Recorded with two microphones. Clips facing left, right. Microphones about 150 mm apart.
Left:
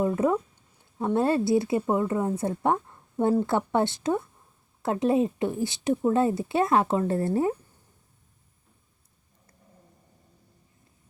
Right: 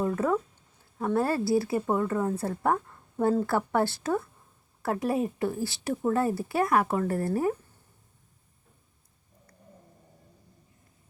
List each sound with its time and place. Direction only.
0.0 s a woman's voice: 20° left (ahead or behind)